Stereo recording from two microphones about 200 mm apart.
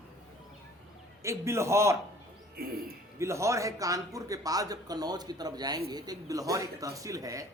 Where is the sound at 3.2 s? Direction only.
15° right (ahead or behind).